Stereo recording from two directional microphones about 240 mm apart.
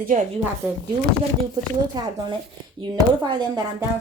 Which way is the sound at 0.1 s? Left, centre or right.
Right.